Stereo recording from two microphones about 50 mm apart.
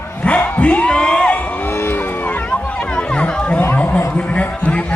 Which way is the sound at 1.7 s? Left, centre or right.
Left.